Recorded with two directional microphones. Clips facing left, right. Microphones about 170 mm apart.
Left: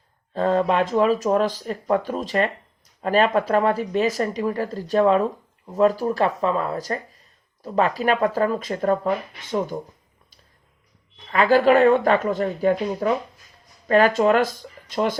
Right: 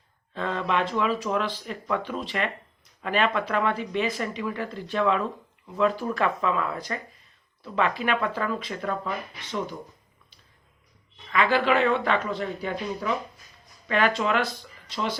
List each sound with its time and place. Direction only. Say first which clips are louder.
0.3 s speech: left 7 dB; 40° left (ahead or behind)
11.3 s speech: left 6 dB; 40° left (ahead or behind)